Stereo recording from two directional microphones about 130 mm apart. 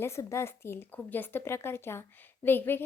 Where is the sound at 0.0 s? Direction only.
20° left (ahead or behind).